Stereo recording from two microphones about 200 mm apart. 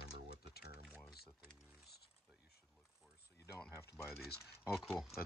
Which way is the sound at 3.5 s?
10° left (ahead or behind).